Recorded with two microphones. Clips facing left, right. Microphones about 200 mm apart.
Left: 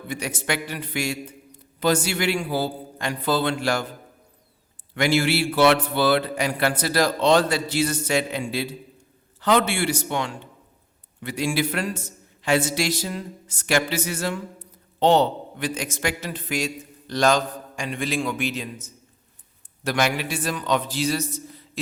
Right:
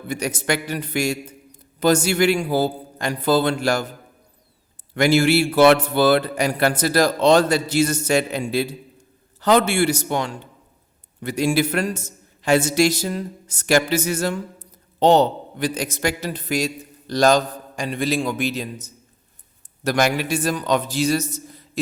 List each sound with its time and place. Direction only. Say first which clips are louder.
0.1 s a man's voice: right 4 dB; 40° right (ahead or behind)
4.9 s a man's voice: right 5 dB; 45° right (ahead or behind)